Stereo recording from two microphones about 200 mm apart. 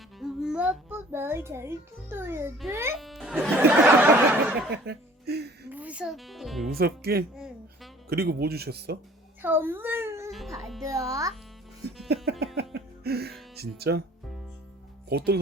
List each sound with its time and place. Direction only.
0.2 s a child's voice: centre (ahead or behind)
3.0 s music: centre (ahead or behind)
4.9 s chuckle: 55° right (ahead or behind)
5.7 s speech: 5° right (ahead or behind)
6.7 s speech: 50° right (ahead or behind)
9.4 s baby cry: 10° right (ahead or behind)
10.3 s music: centre (ahead or behind)
10.8 s a child's voice: 15° right (ahead or behind)
12.0 s music: 55° right (ahead or behind)
13.6 s speech: 55° right (ahead or behind)
15.1 s speech: 55° right (ahead or behind)